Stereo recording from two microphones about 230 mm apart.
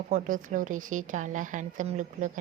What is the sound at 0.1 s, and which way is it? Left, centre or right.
Speech, right.